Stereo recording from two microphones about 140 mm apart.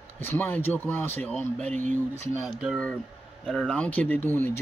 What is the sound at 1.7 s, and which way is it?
Speech, 60° right (ahead or behind).